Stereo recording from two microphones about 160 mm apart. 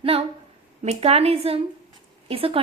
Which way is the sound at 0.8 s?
40° right (ahead or behind).